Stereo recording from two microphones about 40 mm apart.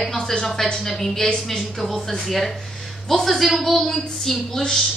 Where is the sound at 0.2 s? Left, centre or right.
Centre.